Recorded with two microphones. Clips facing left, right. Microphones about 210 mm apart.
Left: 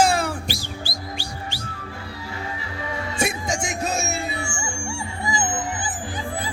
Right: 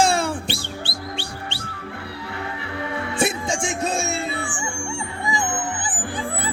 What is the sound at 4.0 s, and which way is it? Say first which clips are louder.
Music: right 2 dB; 30° right (ahead or behind).